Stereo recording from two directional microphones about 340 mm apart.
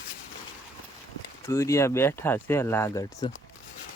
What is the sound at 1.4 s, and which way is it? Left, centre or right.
Speech, centre.